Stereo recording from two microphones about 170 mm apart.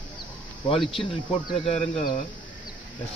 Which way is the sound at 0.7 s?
30° left (ahead or behind).